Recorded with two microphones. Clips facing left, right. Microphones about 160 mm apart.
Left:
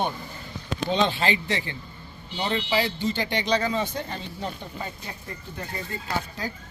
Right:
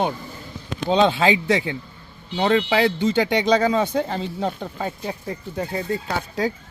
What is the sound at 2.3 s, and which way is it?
Speech, 90° right.